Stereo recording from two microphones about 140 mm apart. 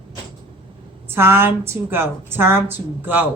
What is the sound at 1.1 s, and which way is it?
A woman's voice, 15° right (ahead or behind).